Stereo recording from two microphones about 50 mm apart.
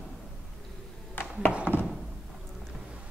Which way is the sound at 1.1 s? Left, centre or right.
Left.